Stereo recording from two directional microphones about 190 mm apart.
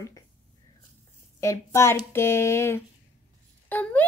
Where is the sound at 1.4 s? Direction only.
15° left (ahead or behind).